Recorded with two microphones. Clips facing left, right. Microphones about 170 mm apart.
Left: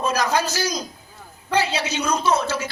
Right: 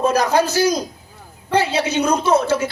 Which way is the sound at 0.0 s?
55° right (ahead or behind).